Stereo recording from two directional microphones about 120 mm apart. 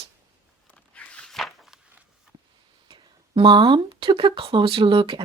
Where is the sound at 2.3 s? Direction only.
40° right (ahead or behind).